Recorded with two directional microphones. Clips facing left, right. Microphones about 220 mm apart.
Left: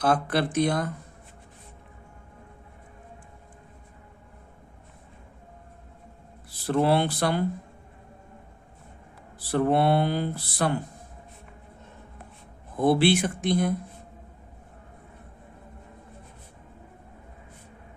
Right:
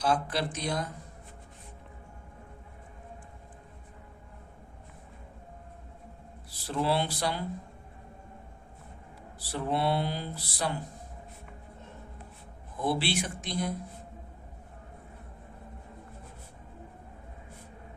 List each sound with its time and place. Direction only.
0.0 s speech: 55° left (ahead or behind)
6.7 s speech: 55° left (ahead or behind)
9.4 s speech: 55° left (ahead or behind)
12.7 s speech: 55° left (ahead or behind)